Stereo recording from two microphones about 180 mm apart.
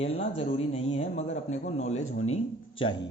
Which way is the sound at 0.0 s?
35° left (ahead or behind).